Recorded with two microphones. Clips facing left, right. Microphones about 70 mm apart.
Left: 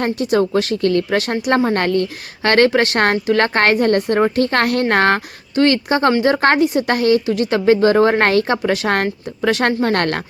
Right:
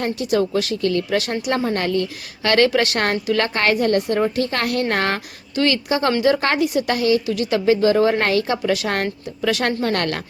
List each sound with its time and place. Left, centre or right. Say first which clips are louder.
0.0 s speech: left 3 dB; left